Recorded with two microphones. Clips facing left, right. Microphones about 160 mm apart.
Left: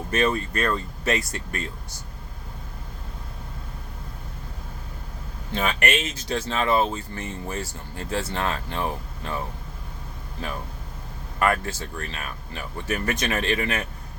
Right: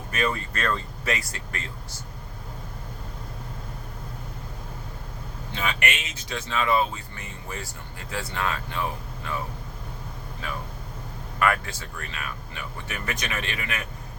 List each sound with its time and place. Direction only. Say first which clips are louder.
0.1 s speech: left 4 dB; 30° left (ahead or behind)
0.5 s speech: left 3 dB; 15° left (ahead or behind)
5.5 s speech: left 5 dB; 40° left (ahead or behind)
11.3 s speech: left 2 dB; 30° left (ahead or behind)